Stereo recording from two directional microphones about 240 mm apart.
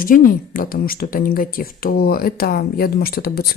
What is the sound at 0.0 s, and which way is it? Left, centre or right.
Speech, left.